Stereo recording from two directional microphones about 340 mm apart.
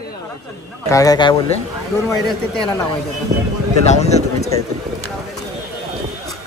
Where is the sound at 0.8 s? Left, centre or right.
Centre.